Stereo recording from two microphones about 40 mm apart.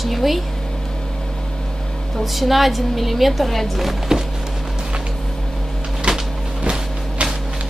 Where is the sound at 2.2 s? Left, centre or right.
Centre.